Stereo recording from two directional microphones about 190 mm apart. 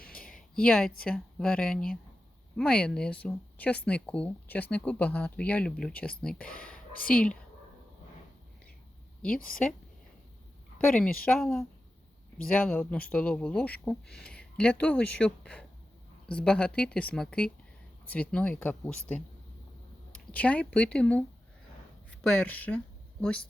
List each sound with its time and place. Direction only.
0.0 s a sound: 50° left (ahead or behind)
0.5 s speech: 5° left (ahead or behind)
10.8 s speech: 5° left (ahead or behind)
20.3 s speech: 5° left (ahead or behind)